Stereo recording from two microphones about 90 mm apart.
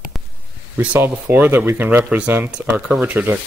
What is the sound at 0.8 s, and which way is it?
Speech, 20° right (ahead or behind).